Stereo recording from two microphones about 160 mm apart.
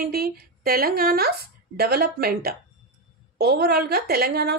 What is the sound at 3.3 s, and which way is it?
A woman's voice, 90° right.